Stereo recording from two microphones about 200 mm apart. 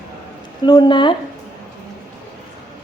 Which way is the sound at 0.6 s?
20° left (ahead or behind).